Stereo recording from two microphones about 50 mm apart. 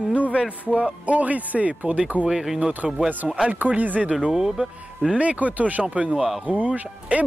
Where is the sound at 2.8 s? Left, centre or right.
Centre.